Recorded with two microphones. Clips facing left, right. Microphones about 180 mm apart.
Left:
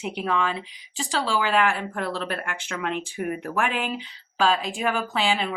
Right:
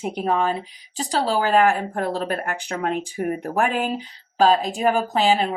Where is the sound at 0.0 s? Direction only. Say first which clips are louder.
Right 4 dB; 40° right (ahead or behind).